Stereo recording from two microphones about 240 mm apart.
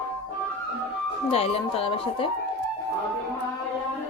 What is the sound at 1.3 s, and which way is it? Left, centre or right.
Speech, left.